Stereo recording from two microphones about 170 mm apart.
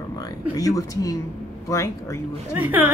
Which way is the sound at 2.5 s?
10° right (ahead or behind).